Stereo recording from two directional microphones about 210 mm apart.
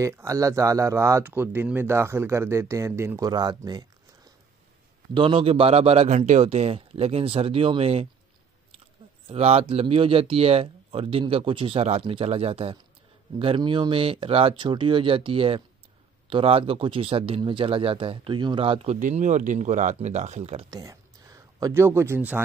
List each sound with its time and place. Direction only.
0.0 s speech: 15° right (ahead or behind)
5.1 s speech: 25° right (ahead or behind)
9.3 s speech: 30° right (ahead or behind)
20.7 s speech: 15° right (ahead or behind)